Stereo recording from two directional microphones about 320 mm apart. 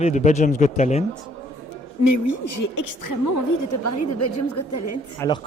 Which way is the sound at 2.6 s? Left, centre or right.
Left.